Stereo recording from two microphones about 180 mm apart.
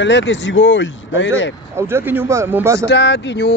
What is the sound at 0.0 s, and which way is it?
Speech, 85° left.